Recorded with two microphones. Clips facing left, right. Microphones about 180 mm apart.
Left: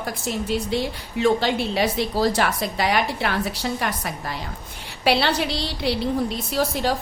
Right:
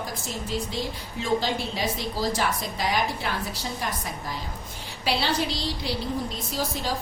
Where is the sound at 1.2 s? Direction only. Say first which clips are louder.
Left 6 dB; 70° left (ahead or behind).